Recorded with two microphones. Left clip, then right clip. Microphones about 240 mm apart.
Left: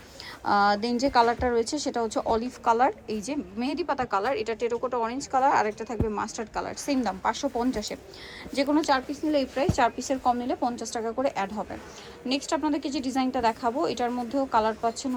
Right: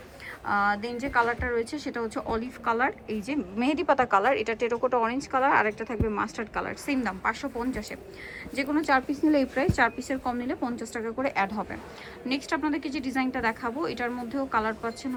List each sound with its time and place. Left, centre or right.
0.4 s a woman's voice: centre
8.9 s a woman's voice: centre